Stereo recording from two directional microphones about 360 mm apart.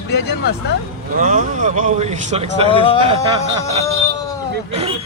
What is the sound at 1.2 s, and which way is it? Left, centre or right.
Speech, right.